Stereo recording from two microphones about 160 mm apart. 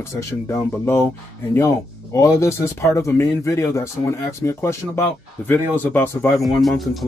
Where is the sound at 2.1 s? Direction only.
20° left (ahead or behind).